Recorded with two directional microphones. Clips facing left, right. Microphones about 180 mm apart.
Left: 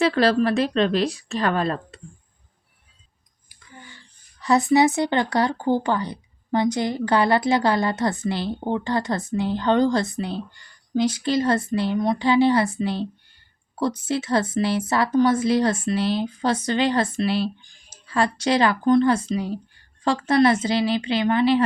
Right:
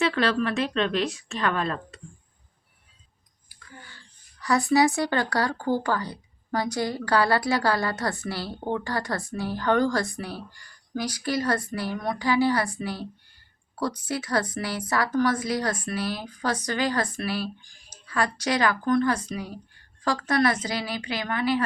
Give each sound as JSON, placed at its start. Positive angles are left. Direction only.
{"t": 0.0, "sound": "a woman's voice", "side_deg": 35}
{"t": 3.5, "sound": "speech", "side_deg": 15}